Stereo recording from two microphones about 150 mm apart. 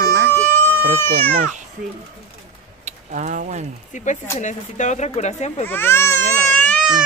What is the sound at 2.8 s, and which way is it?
Speech, 55° right (ahead or behind).